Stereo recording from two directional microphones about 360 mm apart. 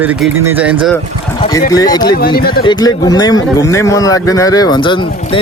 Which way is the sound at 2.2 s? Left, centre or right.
Left.